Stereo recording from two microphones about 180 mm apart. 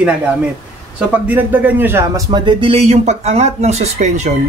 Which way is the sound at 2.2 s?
25° right (ahead or behind).